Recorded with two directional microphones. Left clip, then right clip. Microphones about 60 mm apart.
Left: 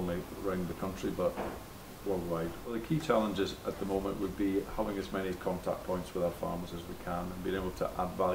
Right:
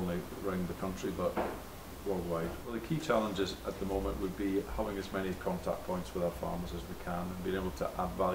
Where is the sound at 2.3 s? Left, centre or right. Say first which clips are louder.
Left 1 dB; centre.